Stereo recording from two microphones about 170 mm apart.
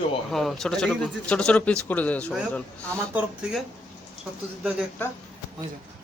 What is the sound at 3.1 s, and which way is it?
Speech, 10° right (ahead or behind).